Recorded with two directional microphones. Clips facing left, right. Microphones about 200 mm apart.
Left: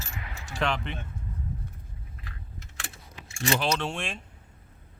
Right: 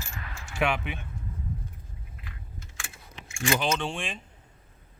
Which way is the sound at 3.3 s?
35° left (ahead or behind).